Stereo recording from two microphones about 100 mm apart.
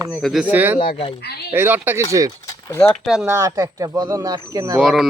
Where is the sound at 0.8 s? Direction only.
65° left (ahead or behind).